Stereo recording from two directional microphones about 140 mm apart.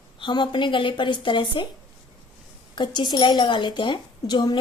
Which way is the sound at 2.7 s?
35° left (ahead or behind).